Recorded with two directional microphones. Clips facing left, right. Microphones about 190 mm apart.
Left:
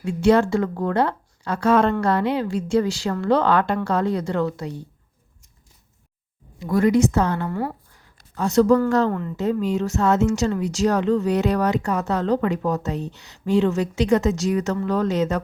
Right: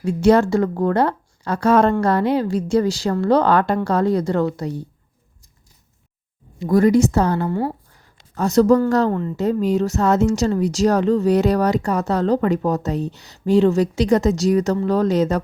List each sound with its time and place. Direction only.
0.0 s a woman's voice: 40° right (ahead or behind)
6.6 s a woman's voice: 40° right (ahead or behind)
8.4 s a woman's voice: 40° right (ahead or behind)